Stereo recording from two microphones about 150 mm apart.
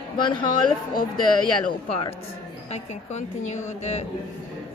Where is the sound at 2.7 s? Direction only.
50° left (ahead or behind).